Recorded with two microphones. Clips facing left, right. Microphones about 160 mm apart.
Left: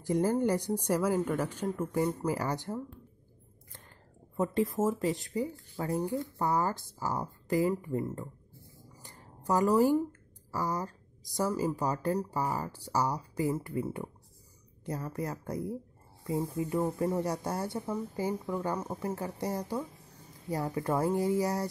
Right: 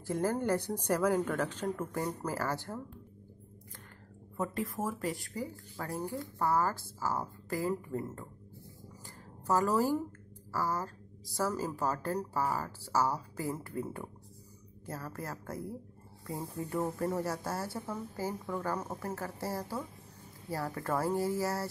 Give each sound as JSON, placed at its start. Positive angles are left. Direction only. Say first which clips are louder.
{"t": 0.0, "sound": "a woman's voice", "louder": "left 4 dB", "side_deg": 15}
{"t": 4.4, "sound": "a woman's voice", "louder": "left 6 dB", "side_deg": 30}
{"t": 9.0, "sound": "a sound", "louder": "left 2 dB", "side_deg": 15}
{"t": 10.5, "sound": "a woman's voice", "louder": "left 1 dB", "side_deg": 15}
{"t": 16.8, "sound": "speech", "louder": "left 1 dB", "side_deg": 20}